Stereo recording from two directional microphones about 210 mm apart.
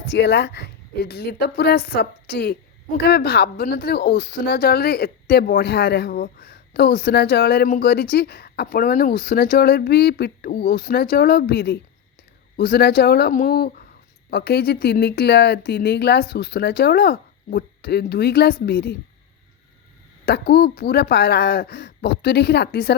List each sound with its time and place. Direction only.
0.1 s speech: 55° left (ahead or behind)
20.2 s speech: 50° left (ahead or behind)